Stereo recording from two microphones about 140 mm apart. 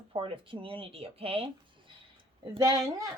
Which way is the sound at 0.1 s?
40° right (ahead or behind).